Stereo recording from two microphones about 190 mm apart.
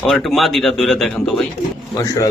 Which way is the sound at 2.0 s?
15° left (ahead or behind).